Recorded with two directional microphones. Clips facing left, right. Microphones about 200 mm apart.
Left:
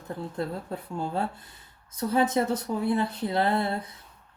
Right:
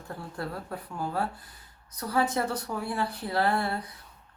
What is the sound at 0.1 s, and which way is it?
Speech, 20° left (ahead or behind).